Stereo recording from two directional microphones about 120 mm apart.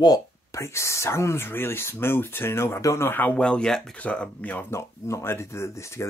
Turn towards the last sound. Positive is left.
turn(degrees=20)  # may be behind; listen again after turning